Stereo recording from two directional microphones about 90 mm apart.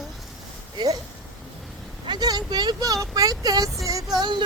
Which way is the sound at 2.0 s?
50° right (ahead or behind).